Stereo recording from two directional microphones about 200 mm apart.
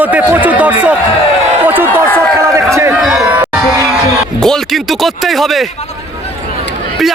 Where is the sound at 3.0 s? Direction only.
Centre (ahead or behind).